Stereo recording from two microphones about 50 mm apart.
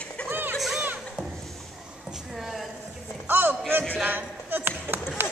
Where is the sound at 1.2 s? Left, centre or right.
Centre.